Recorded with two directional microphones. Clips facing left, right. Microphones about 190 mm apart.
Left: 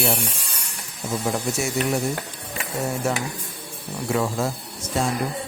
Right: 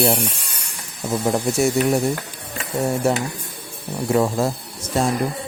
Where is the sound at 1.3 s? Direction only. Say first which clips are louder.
Right 6 dB; 35° right (ahead or behind).